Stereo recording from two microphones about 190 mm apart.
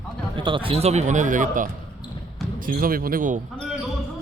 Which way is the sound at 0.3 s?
25° right (ahead or behind).